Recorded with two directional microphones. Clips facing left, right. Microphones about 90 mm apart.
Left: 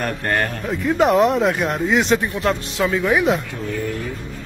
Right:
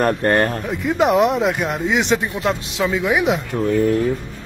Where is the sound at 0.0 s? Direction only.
35° right (ahead or behind).